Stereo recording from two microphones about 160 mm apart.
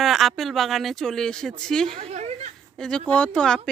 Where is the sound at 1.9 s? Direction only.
45° right (ahead or behind).